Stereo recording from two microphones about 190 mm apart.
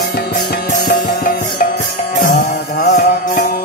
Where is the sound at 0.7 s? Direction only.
50° left (ahead or behind).